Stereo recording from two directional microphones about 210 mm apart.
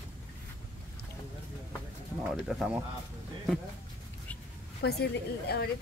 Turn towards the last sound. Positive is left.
turn(degrees=50)  # may be behind; listen again after turning